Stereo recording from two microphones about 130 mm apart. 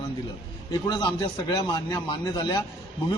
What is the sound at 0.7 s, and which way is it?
A man's voice, 35° left (ahead or behind).